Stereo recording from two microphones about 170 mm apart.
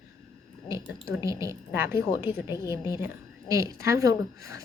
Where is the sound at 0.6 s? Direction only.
15° right (ahead or behind).